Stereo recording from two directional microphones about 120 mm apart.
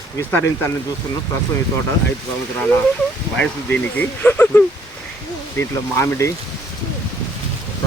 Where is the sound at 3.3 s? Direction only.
10° left (ahead or behind).